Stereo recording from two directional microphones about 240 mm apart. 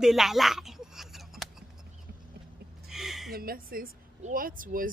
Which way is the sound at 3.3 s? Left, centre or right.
Right.